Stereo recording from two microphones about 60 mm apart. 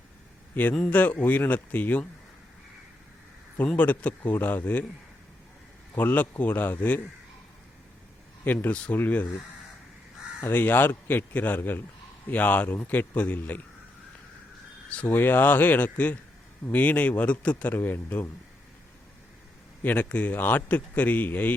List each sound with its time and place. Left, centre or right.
0.9 s a man's voice: left
3.8 s a man's voice: left
5.9 s a man's voice: left
8.4 s a man's voice: left
10.4 s a man's voice: left
15.0 s a man's voice: left
17.7 s speech: left
19.8 s a man's voice: left